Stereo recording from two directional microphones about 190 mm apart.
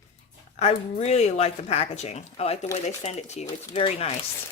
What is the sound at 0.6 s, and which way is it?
Speech, 35° left (ahead or behind).